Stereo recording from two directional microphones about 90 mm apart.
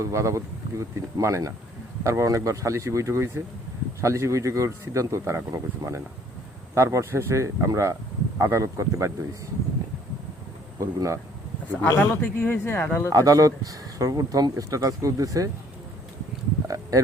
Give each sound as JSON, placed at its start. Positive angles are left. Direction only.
{"t": 0.0, "sound": "speech", "side_deg": -35}
{"t": 10.8, "sound": "speech", "side_deg": -35}
{"t": 11.8, "sound": "speech", "side_deg": 25}
{"t": 13.1, "sound": "speech", "side_deg": -40}
{"t": 16.6, "sound": "a sound", "side_deg": -35}